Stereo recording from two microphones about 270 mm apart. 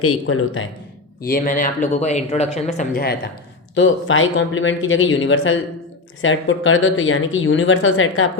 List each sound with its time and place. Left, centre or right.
0.0 s speech: left
1.2 s speech: left
3.8 s speech: left